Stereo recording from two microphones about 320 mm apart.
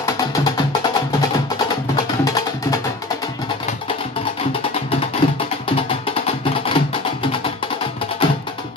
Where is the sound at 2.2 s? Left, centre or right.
Centre.